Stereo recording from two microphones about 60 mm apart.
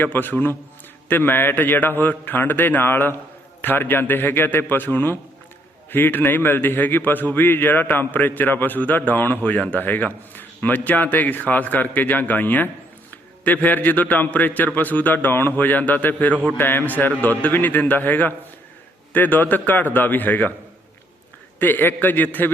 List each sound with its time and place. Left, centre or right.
0.0 s a man's voice: left
21.6 s a man's voice: left